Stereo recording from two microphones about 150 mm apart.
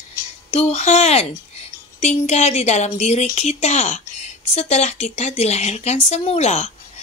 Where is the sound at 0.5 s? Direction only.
45° left (ahead or behind).